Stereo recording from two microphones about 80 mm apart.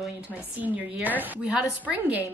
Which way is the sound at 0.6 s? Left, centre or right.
Right.